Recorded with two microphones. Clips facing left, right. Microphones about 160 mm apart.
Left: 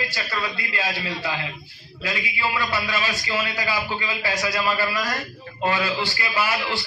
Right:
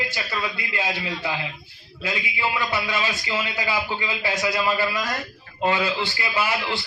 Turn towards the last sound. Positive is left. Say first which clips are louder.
# even
turn(degrees=-20)  # may be behind; listen again after turning